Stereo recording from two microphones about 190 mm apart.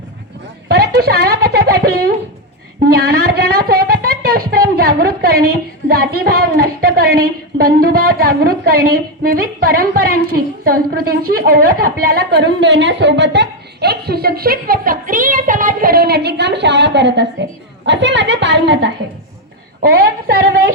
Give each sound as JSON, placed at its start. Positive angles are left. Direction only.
{"t": 0.7, "sound": "a woman's voice", "side_deg": -55}